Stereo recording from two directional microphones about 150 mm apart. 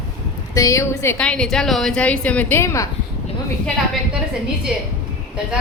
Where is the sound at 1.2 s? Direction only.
5° left (ahead or behind).